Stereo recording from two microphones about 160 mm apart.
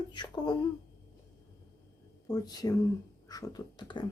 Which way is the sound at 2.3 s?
20° left (ahead or behind).